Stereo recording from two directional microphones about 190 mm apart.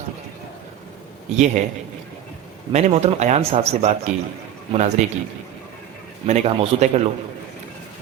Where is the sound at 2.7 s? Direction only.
35° right (ahead or behind).